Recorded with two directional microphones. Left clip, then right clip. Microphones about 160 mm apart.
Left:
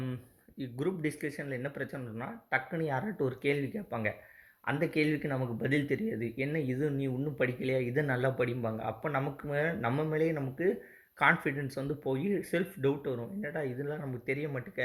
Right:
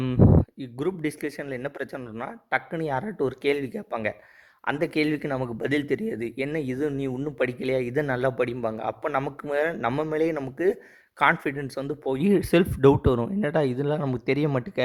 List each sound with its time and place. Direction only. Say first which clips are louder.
0.8 s speech: right 6 dB; 25° right (ahead or behind)